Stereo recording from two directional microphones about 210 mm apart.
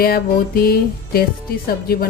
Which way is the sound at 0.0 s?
45° left (ahead or behind).